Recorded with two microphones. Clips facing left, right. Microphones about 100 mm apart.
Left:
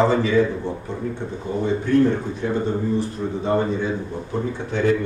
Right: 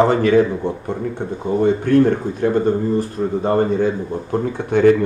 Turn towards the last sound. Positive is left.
turn(degrees=-60)  # may be behind; listen again after turning